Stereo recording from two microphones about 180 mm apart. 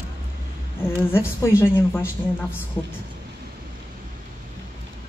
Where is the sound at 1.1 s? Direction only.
15° left (ahead or behind).